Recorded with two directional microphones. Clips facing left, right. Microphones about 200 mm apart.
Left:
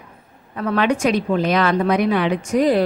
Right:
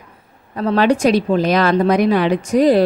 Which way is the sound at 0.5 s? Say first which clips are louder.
Right 4 dB; 35° right (ahead or behind).